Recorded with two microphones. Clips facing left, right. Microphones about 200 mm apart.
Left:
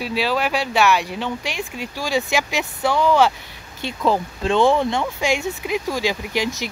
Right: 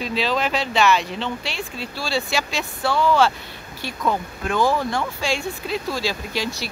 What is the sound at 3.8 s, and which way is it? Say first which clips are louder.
Speech: left 4 dB; 25° left (ahead or behind).